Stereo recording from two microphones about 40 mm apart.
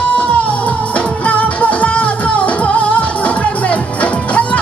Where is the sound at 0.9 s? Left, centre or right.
Left.